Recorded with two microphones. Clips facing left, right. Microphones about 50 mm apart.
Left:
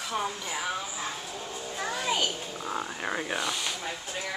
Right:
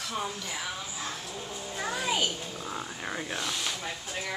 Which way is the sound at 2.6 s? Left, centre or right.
Centre.